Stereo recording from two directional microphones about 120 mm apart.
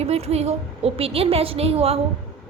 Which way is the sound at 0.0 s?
60° right (ahead or behind).